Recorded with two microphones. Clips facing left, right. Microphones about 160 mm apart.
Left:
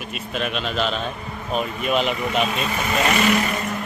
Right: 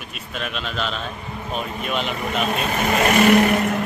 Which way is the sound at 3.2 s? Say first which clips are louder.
Right 6 dB; 50° right (ahead or behind).